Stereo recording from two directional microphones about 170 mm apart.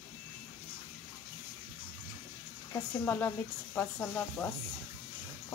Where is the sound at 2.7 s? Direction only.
10° left (ahead or behind).